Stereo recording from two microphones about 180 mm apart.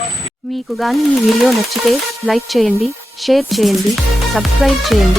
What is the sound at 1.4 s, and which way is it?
Speech, centre (ahead or behind).